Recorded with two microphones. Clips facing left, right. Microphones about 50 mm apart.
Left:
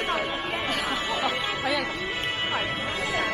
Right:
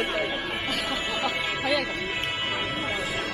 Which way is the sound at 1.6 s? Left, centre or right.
Centre.